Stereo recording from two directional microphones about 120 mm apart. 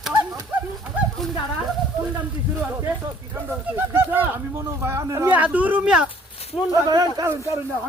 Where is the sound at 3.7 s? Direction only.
20° right (ahead or behind).